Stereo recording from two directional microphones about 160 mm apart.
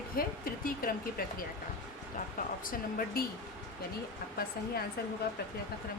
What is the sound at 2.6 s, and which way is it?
Speech, 60° left (ahead or behind).